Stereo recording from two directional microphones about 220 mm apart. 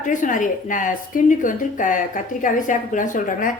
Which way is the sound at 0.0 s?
35° left (ahead or behind).